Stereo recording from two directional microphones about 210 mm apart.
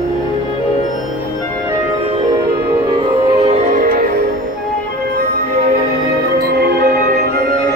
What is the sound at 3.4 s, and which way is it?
Music, 30° right (ahead or behind).